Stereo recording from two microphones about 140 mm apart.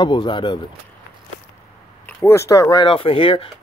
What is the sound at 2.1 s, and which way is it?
Speech, 20° left (ahead or behind).